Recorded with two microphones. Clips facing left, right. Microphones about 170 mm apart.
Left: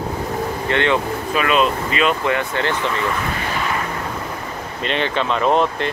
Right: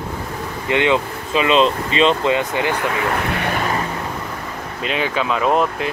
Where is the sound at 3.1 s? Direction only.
60° right (ahead or behind).